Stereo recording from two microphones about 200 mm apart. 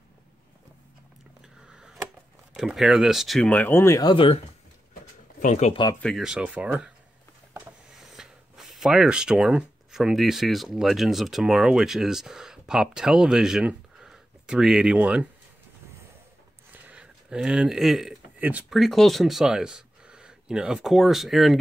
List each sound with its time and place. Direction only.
1.4 s a sound: 5° right (ahead or behind)
2.5 s speech: centre (ahead or behind); by 4.4 s 25° left (ahead or behind)
5.4 s speech: 35° left (ahead or behind)
5.9 s speech: centre (ahead or behind)
16.8 s speech: 5° right (ahead or behind)